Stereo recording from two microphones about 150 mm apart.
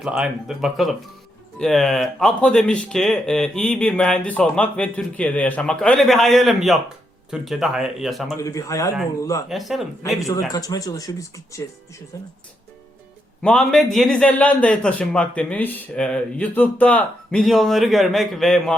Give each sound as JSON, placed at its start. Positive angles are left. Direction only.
{"t": 0.0, "sound": "a man's voice", "side_deg": -5}
{"t": 8.4, "sound": "speech", "side_deg": 20}
{"t": 9.5, "sound": "a man's voice", "side_deg": 0}
{"t": 10.2, "sound": "speech", "side_deg": 25}
{"t": 13.4, "sound": "a man's voice", "side_deg": 5}